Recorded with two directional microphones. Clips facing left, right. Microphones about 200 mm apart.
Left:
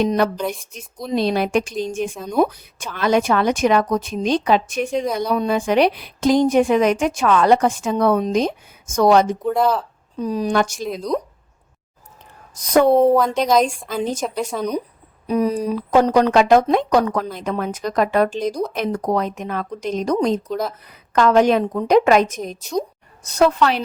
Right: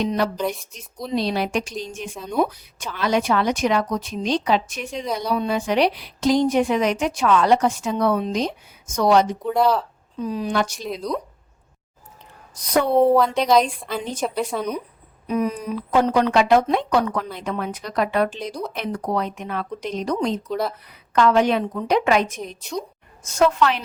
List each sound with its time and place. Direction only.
0.0 s a woman's voice: 50° left (ahead or behind)
0.3 s speech: centre (ahead or behind)
0.6 s a woman's voice: 50° left (ahead or behind)
9.5 s speech: centre (ahead or behind)
10.2 s a woman's voice: 40° left (ahead or behind)
11.1 s speech: centre (ahead or behind)
13.0 s speech: centre (ahead or behind)
15.3 s a woman's voice: 35° left (ahead or behind)
20.5 s speech: centre (ahead or behind)
21.1 s a woman's voice: 45° left (ahead or behind)